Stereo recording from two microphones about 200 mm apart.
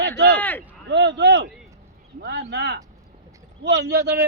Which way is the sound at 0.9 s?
60° right (ahead or behind).